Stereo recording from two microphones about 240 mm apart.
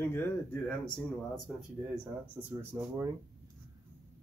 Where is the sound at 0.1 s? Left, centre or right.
Centre.